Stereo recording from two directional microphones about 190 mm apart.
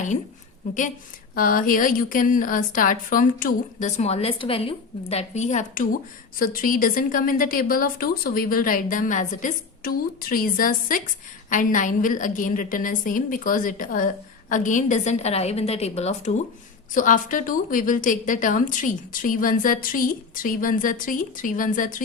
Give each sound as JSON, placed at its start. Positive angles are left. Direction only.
{"t": 1.4, "sound": "a woman's voice", "side_deg": 45}